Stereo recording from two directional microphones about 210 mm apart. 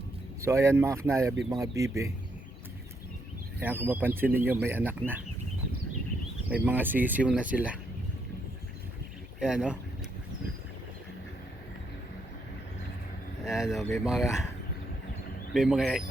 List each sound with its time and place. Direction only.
0.4 s speech: 15° right (ahead or behind)
3.6 s speech: 10° right (ahead or behind)
6.5 s speech: 10° right (ahead or behind)
9.4 s speech: 5° right (ahead or behind)
13.4 s speech: centre (ahead or behind)
15.5 s speech: centre (ahead or behind)